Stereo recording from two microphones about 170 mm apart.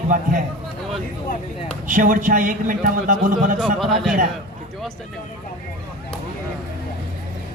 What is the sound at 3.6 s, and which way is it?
Speech, centre (ahead or behind).